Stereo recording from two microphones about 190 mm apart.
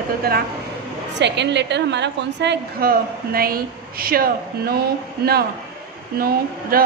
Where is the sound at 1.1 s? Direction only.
65° right (ahead or behind); by 4.8 s 50° right (ahead or behind).